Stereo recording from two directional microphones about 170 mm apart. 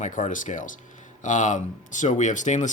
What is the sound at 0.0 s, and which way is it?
Speech, 50° left (ahead or behind).